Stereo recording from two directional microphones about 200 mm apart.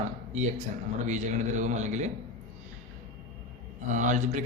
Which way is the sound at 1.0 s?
35° right (ahead or behind).